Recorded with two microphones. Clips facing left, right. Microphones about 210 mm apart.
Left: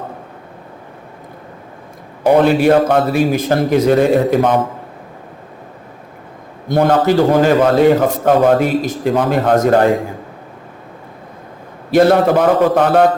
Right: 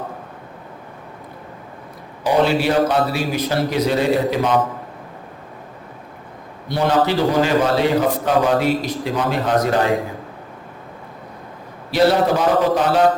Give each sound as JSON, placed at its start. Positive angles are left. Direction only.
{"t": 2.2, "sound": "a man's voice", "side_deg": 50}
{"t": 6.7, "sound": "a man's voice", "side_deg": 50}
{"t": 11.9, "sound": "a man's voice", "side_deg": 50}